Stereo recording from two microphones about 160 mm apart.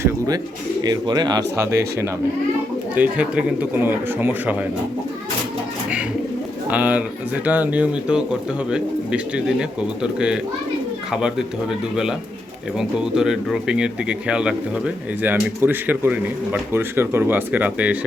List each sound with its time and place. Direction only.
0.8 s speech: 25° right (ahead or behind)
2.9 s speech: 10° right (ahead or behind)
6.7 s speech: 10° right (ahead or behind)
12.7 s speech: 5° right (ahead or behind)